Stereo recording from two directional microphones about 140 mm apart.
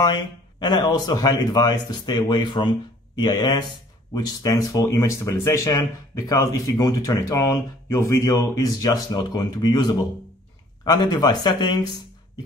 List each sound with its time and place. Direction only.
0.0 s speech: 30° left (ahead or behind)